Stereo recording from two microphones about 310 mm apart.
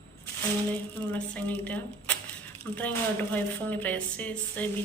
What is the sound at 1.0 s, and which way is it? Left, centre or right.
Speech, centre.